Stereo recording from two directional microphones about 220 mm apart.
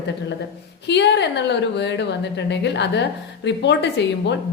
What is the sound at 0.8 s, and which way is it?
A woman's voice, 50° left (ahead or behind).